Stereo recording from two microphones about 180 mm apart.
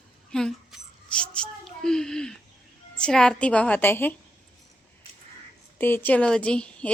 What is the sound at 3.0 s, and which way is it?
A woman's voice, 5° left (ahead or behind).